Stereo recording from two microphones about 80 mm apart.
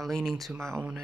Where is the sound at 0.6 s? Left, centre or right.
Right.